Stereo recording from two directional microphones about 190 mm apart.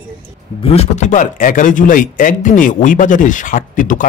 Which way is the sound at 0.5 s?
30° left (ahead or behind).